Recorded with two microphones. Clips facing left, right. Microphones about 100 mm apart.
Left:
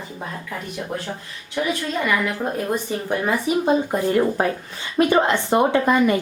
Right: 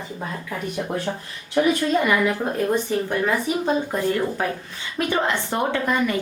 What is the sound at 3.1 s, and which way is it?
Speech, 15° left (ahead or behind).